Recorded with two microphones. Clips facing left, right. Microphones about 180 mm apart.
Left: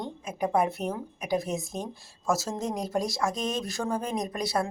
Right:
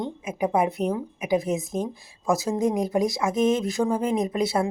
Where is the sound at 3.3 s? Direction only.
20° right (ahead or behind).